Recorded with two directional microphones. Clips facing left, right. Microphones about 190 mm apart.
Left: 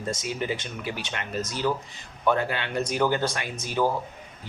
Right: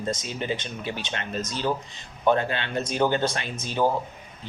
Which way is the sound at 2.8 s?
25° right (ahead or behind).